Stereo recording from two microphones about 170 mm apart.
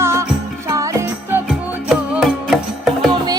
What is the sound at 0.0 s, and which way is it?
Music, 15° right (ahead or behind).